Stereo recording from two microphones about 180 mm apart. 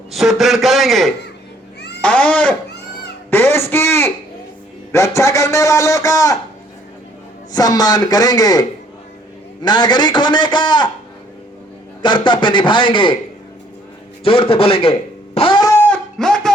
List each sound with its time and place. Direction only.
0.1 s a man's voice: centre (ahead or behind)
2.0 s cat: 5° left (ahead or behind)
3.2 s a sound: 10° left (ahead or behind)
4.9 s a man's voice: 15° left (ahead or behind)
7.5 s a man's voice: 20° left (ahead or behind)
9.6 s a man's voice: 25° left (ahead or behind)
12.0 s a man's voice: 25° left (ahead or behind)
14.3 s a man's voice: 30° left (ahead or behind)
15.4 s a sound: 25° left (ahead or behind)
15.7 s a sound: 10° left (ahead or behind)